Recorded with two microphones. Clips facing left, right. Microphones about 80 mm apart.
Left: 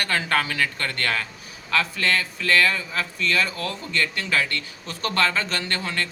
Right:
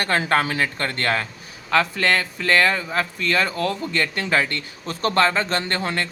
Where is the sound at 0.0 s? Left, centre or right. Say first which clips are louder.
Right 3 dB; right.